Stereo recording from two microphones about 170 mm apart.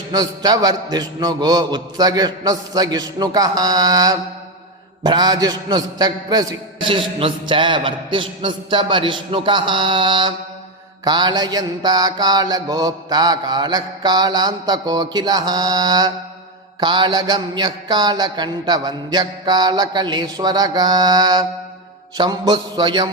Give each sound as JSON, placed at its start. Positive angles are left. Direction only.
{"t": 0.1, "sound": "mantra", "side_deg": -20}